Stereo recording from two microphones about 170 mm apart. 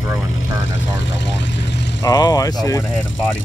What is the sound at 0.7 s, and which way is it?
Speech, 90° left.